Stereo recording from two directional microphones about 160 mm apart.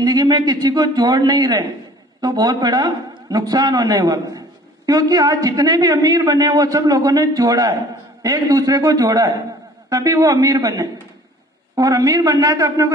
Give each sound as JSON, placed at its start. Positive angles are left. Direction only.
{"t": 0.0, "sound": "a woman's voice", "side_deg": -25}